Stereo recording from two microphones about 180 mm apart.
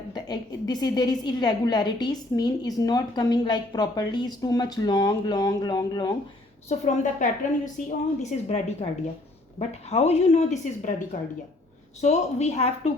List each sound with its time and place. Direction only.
0.1 s a woman's voice: 25° left (ahead or behind)
6.7 s a woman's voice: 40° left (ahead or behind)